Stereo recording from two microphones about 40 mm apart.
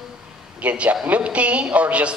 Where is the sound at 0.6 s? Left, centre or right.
Right.